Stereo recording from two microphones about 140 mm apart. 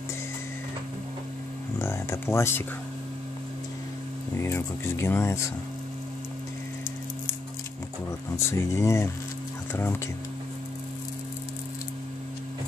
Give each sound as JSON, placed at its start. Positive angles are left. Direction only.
{"t": 1.8, "sound": "speech", "side_deg": 20}
{"t": 4.4, "sound": "speech", "side_deg": 20}
{"t": 8.3, "sound": "speech", "side_deg": 20}